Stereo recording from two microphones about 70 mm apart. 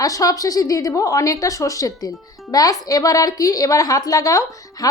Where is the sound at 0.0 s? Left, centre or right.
Left.